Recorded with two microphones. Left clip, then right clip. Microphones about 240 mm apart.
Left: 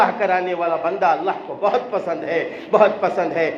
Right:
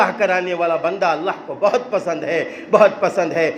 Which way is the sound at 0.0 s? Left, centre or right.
Right.